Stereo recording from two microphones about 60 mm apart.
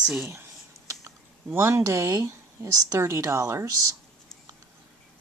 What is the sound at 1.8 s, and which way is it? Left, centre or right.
Speech, right.